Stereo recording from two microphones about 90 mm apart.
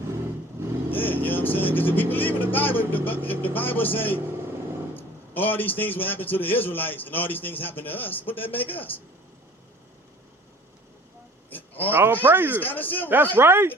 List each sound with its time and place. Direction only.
0.9 s a man's voice: 20° left (ahead or behind)
11.5 s a sound: 20° left (ahead or behind)
11.9 s speech: 25° right (ahead or behind)
12.6 s a man's voice: 20° left (ahead or behind)
13.3 s speech: 25° right (ahead or behind)